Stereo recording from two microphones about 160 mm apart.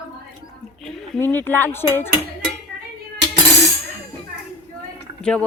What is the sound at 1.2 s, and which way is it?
Speech, 15° left (ahead or behind).